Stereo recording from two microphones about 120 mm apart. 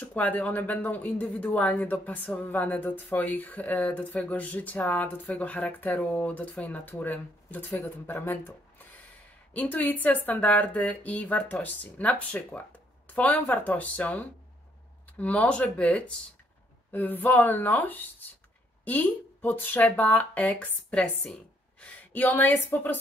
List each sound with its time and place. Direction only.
0.0 s speech: 15° left (ahead or behind)